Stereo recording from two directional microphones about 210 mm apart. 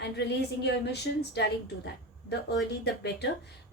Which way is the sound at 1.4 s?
50° left (ahead or behind).